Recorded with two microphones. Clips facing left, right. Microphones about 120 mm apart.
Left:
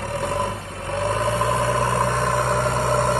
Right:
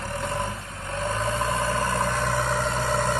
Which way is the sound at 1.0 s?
70° left (ahead or behind).